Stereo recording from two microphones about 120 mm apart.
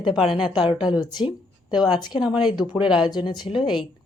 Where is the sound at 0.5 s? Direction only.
45° left (ahead or behind).